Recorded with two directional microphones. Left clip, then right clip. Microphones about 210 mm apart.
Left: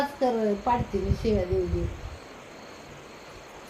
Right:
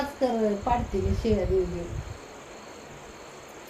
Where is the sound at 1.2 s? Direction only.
15° left (ahead or behind).